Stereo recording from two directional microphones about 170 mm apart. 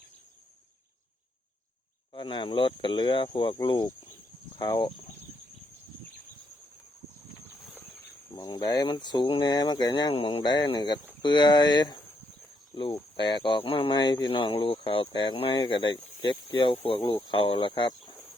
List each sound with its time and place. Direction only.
2.1 s speech: 30° left (ahead or behind)
8.4 s speech: 20° left (ahead or behind)